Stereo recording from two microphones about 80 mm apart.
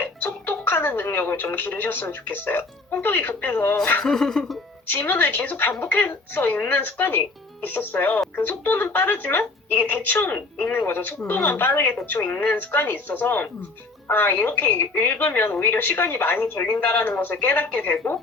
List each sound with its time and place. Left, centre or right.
0.4 s speech: left
4.0 s speech: centre
4.9 s speech: left